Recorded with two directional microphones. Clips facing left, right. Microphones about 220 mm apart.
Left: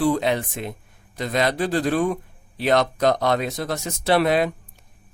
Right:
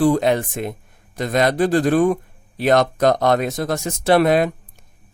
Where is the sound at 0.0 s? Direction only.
45° right (ahead or behind).